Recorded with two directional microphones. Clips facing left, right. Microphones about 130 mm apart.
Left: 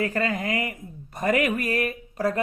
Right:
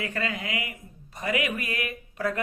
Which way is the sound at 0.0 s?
45° left (ahead or behind).